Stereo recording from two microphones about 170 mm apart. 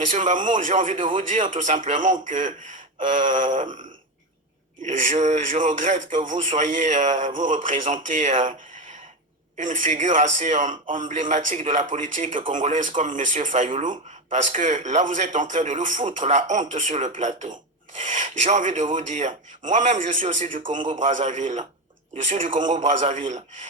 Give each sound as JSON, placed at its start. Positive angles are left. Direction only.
{"t": 0.0, "sound": "speech", "side_deg": -45}
{"t": 9.6, "sound": "speech", "side_deg": -50}
{"t": 11.6, "sound": "speech", "side_deg": -35}
{"t": 11.9, "sound": "speech", "side_deg": -50}